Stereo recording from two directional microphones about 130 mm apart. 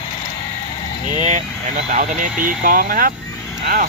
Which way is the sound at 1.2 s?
65° right (ahead or behind).